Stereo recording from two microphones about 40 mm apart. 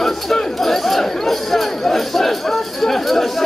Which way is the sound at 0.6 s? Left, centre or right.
Centre.